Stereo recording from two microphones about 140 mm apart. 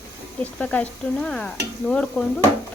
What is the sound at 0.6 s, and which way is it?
Speech, 10° left (ahead or behind).